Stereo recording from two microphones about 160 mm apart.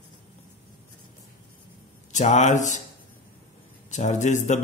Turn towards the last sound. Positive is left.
turn(degrees=50)  # may be behind; listen again after turning